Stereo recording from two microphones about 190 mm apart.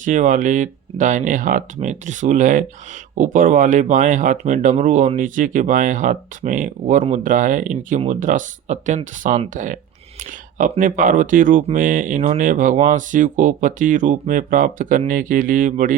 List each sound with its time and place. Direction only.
0.0 s speech: 40° right (ahead or behind)